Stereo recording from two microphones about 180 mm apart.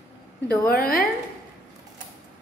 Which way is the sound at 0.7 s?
55° left (ahead or behind).